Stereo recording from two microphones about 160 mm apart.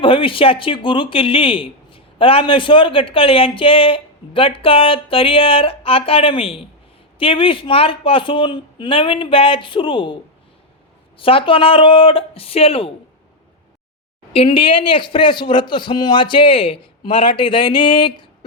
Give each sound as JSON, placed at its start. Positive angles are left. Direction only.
{"t": 0.0, "sound": "speech", "side_deg": 35}
{"t": 11.2, "sound": "speech", "side_deg": 35}
{"t": 14.3, "sound": "speech", "side_deg": 35}